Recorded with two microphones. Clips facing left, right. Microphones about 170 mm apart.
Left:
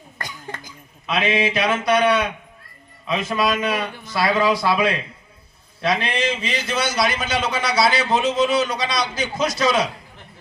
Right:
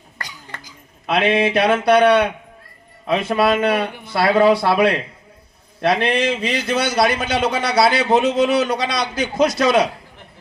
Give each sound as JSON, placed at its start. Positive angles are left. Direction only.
{"t": 0.2, "sound": "cough", "side_deg": 50}
{"t": 1.0, "sound": "a man's voice", "side_deg": -60}